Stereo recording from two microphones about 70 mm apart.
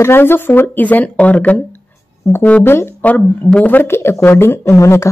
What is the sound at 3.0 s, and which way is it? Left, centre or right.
Speech, left.